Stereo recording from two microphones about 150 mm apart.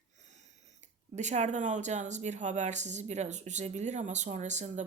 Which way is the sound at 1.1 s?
50° right (ahead or behind).